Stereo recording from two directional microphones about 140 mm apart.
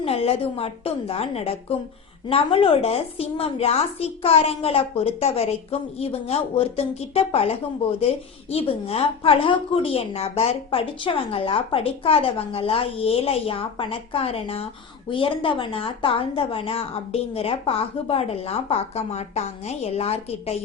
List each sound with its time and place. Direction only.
0.0 s a woman's voice: 45° left (ahead or behind)